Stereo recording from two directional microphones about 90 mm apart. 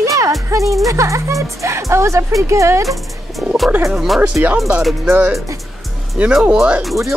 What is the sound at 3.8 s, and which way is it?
Speech, centre (ahead or behind).